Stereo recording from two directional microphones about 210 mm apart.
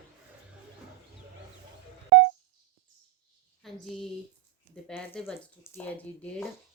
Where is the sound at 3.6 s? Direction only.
Centre (ahead or behind).